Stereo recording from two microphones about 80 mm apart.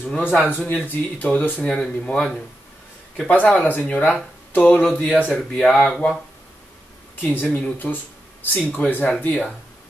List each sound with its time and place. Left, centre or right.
0.0 s a man's voice: centre
1.7 s speech: centre
7.5 s a man's voice: left